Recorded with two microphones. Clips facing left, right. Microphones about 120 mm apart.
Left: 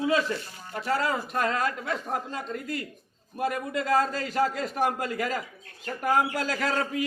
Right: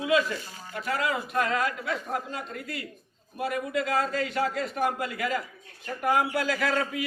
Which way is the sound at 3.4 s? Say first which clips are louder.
Even; 40° left (ahead or behind).